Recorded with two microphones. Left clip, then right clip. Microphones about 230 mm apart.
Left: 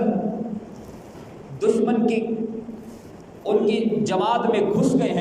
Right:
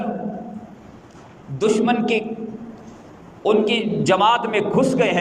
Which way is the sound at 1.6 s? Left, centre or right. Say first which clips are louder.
Right 2 dB; right.